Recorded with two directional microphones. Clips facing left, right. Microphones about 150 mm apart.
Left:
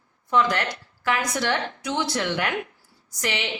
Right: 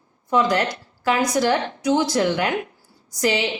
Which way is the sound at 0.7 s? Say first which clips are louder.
Right 4 dB; 30° right (ahead or behind).